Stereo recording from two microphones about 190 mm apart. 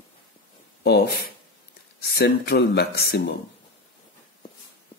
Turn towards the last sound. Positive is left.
turn(degrees=60)  # may be behind; listen again after turning